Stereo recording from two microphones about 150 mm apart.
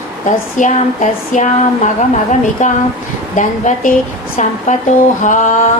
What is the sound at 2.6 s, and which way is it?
Speech, 55° left (ahead or behind).